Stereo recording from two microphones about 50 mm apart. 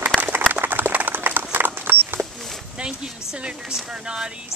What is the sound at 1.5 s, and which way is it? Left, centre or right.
Horse, right.